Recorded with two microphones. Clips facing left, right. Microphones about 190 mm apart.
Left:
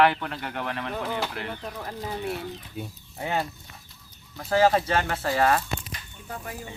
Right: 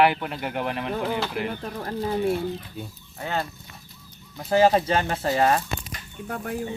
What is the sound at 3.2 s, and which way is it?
Speech, 15° left (ahead or behind).